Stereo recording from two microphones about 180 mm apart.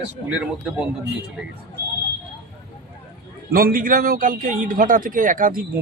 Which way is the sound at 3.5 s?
55° right (ahead or behind).